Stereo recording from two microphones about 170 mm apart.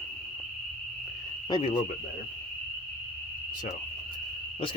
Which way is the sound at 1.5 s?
25° left (ahead or behind).